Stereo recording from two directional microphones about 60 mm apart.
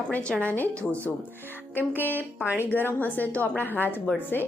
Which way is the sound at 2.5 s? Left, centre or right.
Left.